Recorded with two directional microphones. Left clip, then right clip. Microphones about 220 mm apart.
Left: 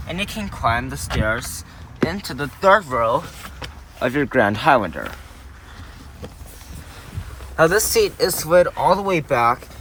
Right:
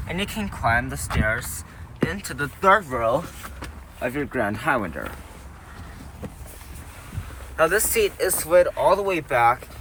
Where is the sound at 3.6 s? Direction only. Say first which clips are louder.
Left 6 dB; 20° left (ahead or behind).